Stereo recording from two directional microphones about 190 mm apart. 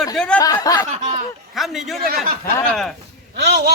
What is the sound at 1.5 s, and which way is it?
Speech, centre (ahead or behind).